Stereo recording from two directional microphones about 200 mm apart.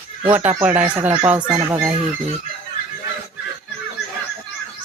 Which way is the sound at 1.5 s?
20° right (ahead or behind).